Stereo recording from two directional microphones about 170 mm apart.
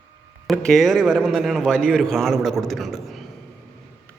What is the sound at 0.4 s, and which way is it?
A man's voice, centre (ahead or behind).